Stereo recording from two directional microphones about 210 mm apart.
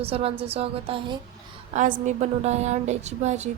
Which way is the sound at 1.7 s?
35° right (ahead or behind).